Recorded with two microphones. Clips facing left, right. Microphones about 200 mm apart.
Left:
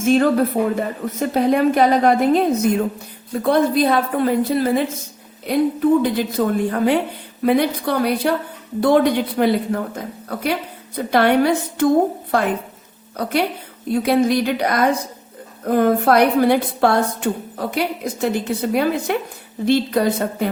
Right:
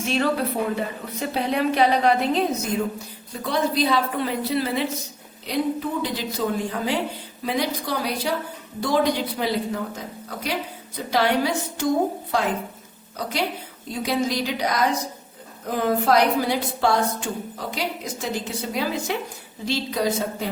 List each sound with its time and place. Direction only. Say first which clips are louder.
0.0 s a woman's voice: left 8 dB; 50° left (ahead or behind)